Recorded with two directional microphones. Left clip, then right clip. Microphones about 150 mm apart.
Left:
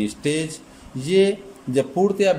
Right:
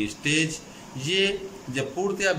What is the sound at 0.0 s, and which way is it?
A man's voice, 35° left (ahead or behind).